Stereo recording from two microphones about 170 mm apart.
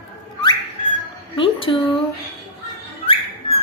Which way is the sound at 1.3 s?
30° left (ahead or behind).